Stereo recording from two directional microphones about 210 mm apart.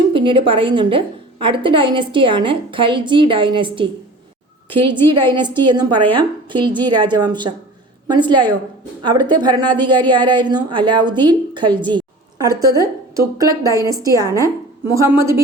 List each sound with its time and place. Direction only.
0.1 s a woman's voice: 25° right (ahead or behind)